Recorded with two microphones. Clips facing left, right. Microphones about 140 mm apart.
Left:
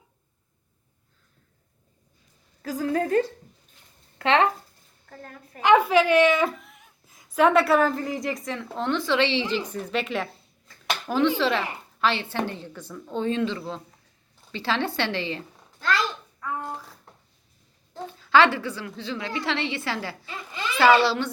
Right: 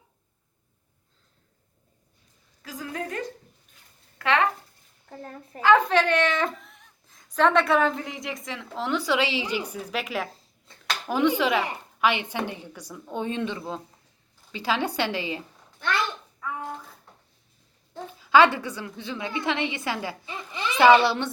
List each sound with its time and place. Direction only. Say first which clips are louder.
2.6 s a woman's voice: left 9 dB; 40° left (ahead or behind)
5.0 s a woman's voice: right 3 dB; 15° right (ahead or behind)
5.5 s speech: left 2 dB; 15° left (ahead or behind); by 10.2 s 5° right (ahead or behind)
10.7 s a sound: right 1 dB; 25° right (ahead or behind)
11.0 s speech: even; 10° right (ahead or behind)
18.2 s a woman's voice: right 1 dB; 15° right (ahead or behind)